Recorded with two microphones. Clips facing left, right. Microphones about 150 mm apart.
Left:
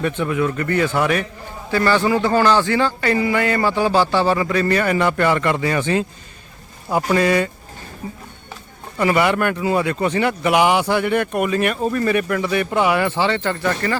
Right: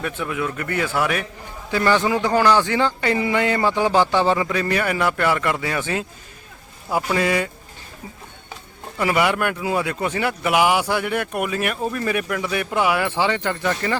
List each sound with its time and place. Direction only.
0.0 s speech: 5° right (ahead or behind)
1.7 s a man's voice: 15° right (ahead or behind)
8.0 s speech: 55° left (ahead or behind)
9.0 s a man's voice: 5° right (ahead or behind)